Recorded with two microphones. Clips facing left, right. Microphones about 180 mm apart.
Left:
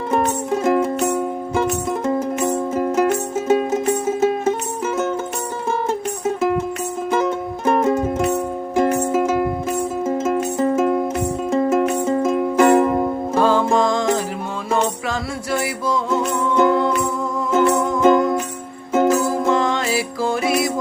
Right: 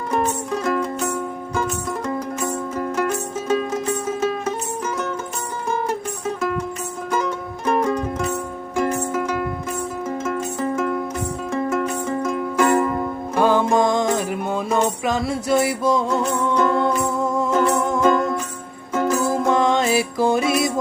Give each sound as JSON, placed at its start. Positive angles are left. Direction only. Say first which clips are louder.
{"t": 0.1, "sound": "music", "louder": "left 3 dB", "side_deg": 25}
{"t": 7.1, "sound": "music", "louder": "left 4 dB", "side_deg": 25}
{"t": 13.4, "sound": "music", "louder": "even", "side_deg": -20}
{"t": 16.6, "sound": "music", "louder": "left 4 dB", "side_deg": 25}
{"t": 19.5, "sound": "music", "louder": "right 2 dB", "side_deg": -20}
{"t": 20.4, "sound": "music", "louder": "left 1 dB", "side_deg": 25}